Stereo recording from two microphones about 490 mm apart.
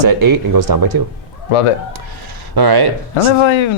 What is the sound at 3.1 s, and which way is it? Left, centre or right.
Speech, left.